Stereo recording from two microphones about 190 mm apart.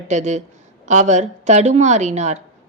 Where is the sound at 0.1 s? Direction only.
35° right (ahead or behind).